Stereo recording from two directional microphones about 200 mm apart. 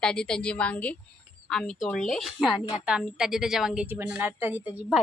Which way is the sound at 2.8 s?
5° right (ahead or behind).